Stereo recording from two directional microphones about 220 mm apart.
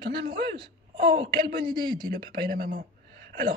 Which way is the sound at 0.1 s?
45° right (ahead or behind).